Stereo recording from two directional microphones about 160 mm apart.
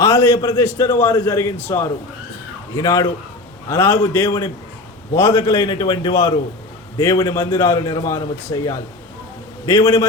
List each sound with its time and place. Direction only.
0.0 s a man's voice: 15° left (ahead or behind)